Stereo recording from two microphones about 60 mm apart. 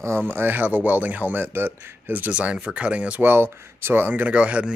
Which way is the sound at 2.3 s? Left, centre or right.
Centre.